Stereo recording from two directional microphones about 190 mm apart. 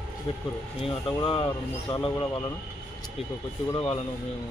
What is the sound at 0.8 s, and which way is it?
Speech, 25° left (ahead or behind).